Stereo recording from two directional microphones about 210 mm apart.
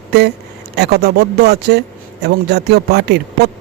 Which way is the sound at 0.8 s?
50° right (ahead or behind).